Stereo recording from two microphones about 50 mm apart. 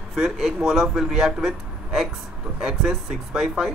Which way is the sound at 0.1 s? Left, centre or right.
Centre.